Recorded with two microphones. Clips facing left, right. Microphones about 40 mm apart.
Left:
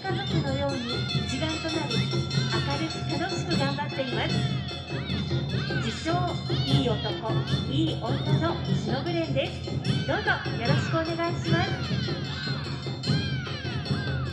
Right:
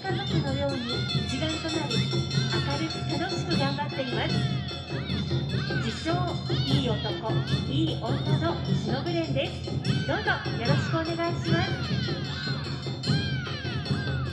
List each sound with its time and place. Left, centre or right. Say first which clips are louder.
0.1 s music: even; centre
8.1 s speech: left 1 dB; centre